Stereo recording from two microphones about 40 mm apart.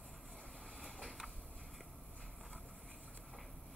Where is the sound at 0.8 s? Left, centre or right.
Centre.